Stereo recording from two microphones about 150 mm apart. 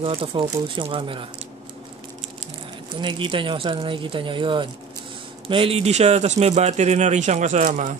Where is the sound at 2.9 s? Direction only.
30° right (ahead or behind); by 7.9 s 60° right (ahead or behind).